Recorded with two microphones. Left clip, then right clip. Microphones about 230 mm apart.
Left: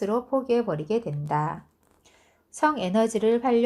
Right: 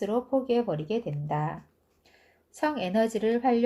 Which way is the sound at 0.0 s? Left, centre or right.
Left.